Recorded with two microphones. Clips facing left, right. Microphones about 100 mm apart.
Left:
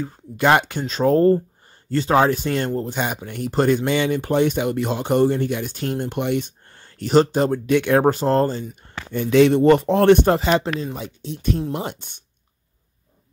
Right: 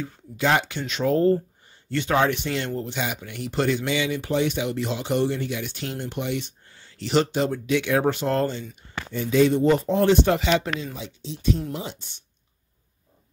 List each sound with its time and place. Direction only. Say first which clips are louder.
0.4 s speech: left 5 dB; 55° left (ahead or behind); by 8.6 s 35° left (ahead or behind)
8.8 s speech: left 3 dB; 55° left (ahead or behind)
10.2 s speech: left 4 dB; 45° left (ahead or behind)